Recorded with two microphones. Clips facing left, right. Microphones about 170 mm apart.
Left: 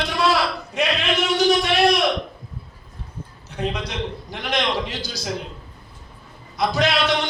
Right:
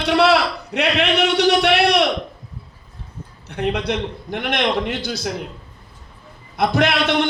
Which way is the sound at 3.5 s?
65° right (ahead or behind).